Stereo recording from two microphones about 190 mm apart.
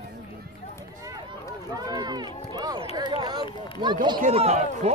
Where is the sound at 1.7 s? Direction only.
20° right (ahead or behind).